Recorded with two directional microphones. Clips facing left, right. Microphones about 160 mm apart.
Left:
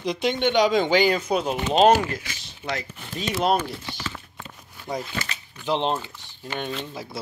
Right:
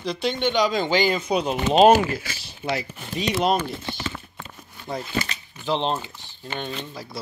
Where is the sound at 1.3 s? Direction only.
5° left (ahead or behind).